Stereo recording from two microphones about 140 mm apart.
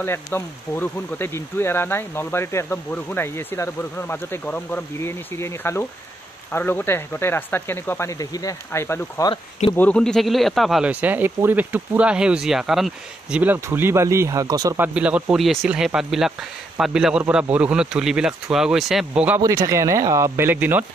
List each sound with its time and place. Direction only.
0.0 s speech: 15° left (ahead or behind)
9.3 s speech: 40° left (ahead or behind)
9.8 s speech: 10° left (ahead or behind); by 14.8 s 25° right (ahead or behind)
14.8 s speech: 10° right (ahead or behind)
19.4 s speech: 20° right (ahead or behind)